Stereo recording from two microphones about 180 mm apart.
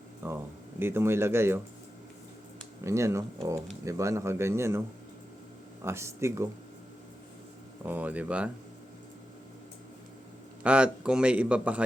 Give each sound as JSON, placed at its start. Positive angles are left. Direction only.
{"t": 0.2, "sound": "a sound", "side_deg": -15}
{"t": 0.8, "sound": "a man's voice", "side_deg": -15}
{"t": 2.8, "sound": "a man's voice", "side_deg": -15}
{"t": 5.8, "sound": "a man's voice", "side_deg": -15}
{"t": 7.9, "sound": "a man's voice", "side_deg": -10}
{"t": 10.6, "sound": "a man's voice", "side_deg": -5}